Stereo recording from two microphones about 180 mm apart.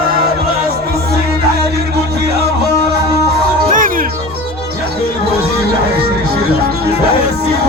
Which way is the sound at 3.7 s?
50° right (ahead or behind).